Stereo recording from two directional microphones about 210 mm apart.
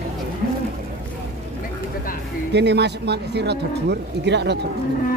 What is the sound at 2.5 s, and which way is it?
Speech, 55° right (ahead or behind).